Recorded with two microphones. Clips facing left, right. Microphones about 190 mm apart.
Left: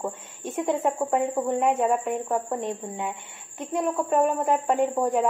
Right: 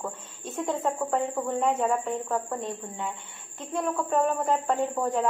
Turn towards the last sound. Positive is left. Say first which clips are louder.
# left 4 dB
turn(degrees=15)  # may be behind; listen again after turning